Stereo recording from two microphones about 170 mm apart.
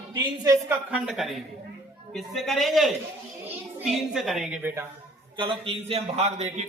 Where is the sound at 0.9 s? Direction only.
5° right (ahead or behind).